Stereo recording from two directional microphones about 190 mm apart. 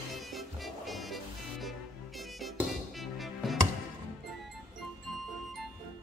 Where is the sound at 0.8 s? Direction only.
Centre (ahead or behind).